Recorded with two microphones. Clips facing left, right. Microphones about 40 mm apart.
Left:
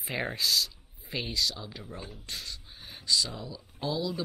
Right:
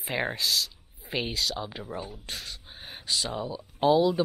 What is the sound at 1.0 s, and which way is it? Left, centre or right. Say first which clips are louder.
Speech: right 2 dB; centre.